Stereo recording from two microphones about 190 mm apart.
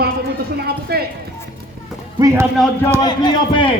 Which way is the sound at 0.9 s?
55° right (ahead or behind).